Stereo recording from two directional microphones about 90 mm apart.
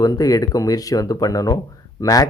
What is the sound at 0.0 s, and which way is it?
Speech, 40° left (ahead or behind).